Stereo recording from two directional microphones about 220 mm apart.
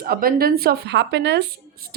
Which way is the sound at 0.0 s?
40° right (ahead or behind).